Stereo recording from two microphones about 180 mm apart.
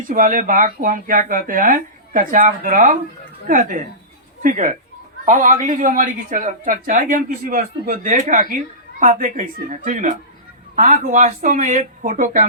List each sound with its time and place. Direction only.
0.1 s a woman's voice: 50° right (ahead or behind)